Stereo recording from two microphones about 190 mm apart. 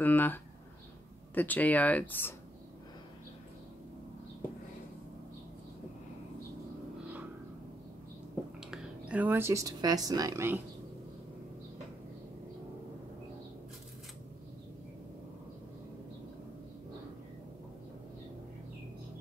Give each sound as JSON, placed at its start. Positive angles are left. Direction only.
{"t": 0.0, "sound": "speech", "side_deg": 10}
{"t": 8.6, "sound": "speech", "side_deg": -5}